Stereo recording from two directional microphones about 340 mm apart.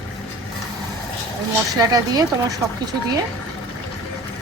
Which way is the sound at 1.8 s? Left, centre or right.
Centre.